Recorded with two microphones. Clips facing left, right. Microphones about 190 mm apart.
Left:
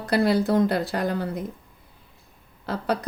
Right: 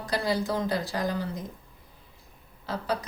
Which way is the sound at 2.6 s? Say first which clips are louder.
Left 4 dB; 60° left (ahead or behind).